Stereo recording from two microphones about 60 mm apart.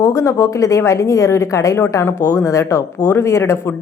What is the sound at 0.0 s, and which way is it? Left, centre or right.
A woman's voice, left.